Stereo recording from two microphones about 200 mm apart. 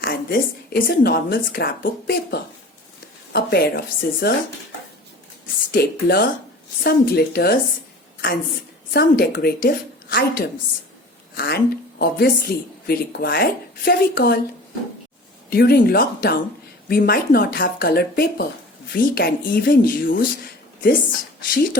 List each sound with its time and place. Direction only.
0.0 s a woman's voice: 45° left (ahead or behind)
5.7 s a woman's voice: 50° left (ahead or behind)
8.9 s a woman's voice: 50° left (ahead or behind)
11.3 s a woman's voice: 50° left (ahead or behind)
15.4 s a woman's voice: 50° left (ahead or behind)
21.5 s a woman's voice: 45° left (ahead or behind)